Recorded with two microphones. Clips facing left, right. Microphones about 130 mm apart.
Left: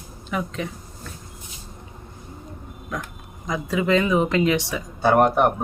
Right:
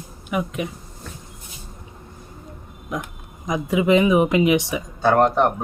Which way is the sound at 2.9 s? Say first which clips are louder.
Right 3 dB; 20° right (ahead or behind).